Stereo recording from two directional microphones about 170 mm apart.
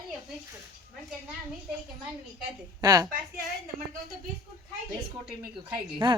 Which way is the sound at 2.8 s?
20° right (ahead or behind).